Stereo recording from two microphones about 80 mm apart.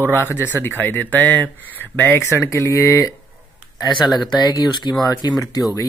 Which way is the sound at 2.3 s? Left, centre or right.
Left.